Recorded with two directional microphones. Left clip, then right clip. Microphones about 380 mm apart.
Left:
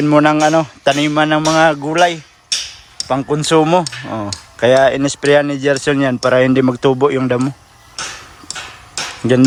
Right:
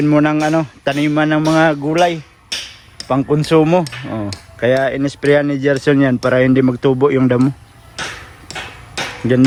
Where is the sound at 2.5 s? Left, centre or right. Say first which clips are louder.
Left 4 dB; centre.